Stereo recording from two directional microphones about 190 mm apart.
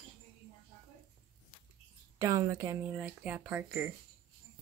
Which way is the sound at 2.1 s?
15° right (ahead or behind).